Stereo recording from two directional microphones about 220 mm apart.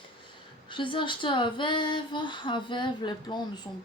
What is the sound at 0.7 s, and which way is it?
Female singing, 20° left (ahead or behind).